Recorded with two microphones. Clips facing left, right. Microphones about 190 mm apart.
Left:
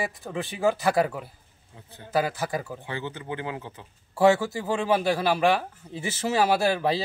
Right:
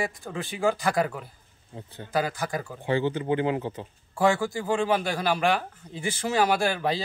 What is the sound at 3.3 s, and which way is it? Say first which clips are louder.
Speech: right 7 dB; 20° right (ahead or behind).